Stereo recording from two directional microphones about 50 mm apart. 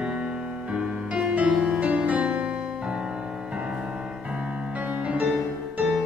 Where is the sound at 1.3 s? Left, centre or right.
Right.